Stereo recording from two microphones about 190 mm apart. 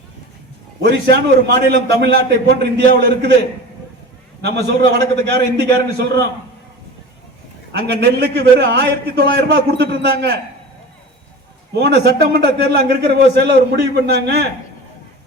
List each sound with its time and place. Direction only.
0.8 s a man's voice: 65° right (ahead or behind)
4.4 s a man's voice: 60° right (ahead or behind)
7.9 s a man's voice: 60° right (ahead or behind)
11.7 s a man's voice: 60° right (ahead or behind)